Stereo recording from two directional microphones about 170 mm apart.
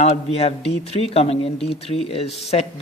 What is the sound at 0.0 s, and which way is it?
A man's voice, 40° left (ahead or behind).